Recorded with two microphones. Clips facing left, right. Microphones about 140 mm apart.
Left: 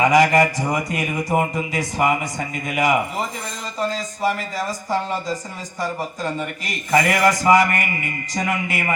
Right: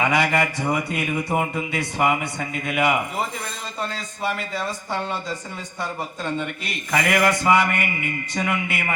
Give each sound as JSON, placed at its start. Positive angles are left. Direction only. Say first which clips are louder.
{"t": 0.0, "sound": "a man's voice", "louder": "left 6 dB", "side_deg": 40}